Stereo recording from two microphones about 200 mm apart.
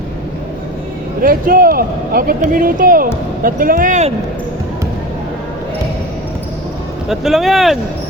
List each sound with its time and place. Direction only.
1.2 s speech: 45° right (ahead or behind)
7.1 s speech: centre (ahead or behind)